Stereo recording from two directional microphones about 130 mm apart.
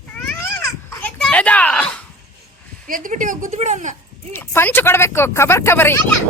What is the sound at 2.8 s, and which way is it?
Speech, 90° right.